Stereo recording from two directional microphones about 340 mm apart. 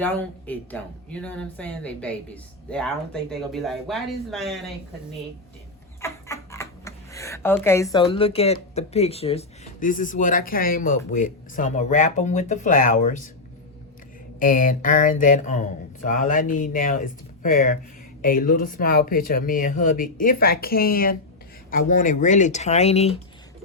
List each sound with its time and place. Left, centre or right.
0.4 s a woman's voice: centre
6.0 s speech: centre
14.3 s speech: left